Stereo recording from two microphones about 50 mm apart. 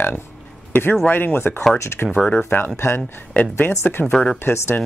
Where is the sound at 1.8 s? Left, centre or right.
Left.